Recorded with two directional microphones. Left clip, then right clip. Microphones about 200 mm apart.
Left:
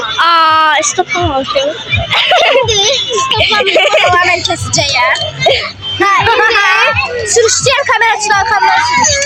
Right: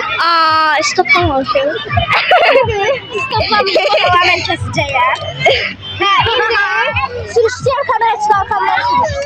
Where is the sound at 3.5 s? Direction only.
5° left (ahead or behind).